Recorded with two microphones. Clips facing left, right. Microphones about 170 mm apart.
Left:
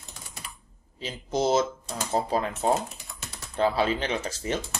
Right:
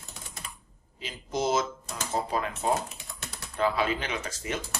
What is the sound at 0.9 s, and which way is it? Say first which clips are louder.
Speech: left 4 dB; 30° left (ahead or behind).